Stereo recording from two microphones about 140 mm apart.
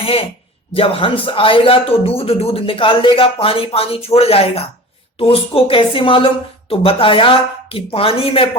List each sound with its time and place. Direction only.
0.7 s a man's voice: 40° left (ahead or behind)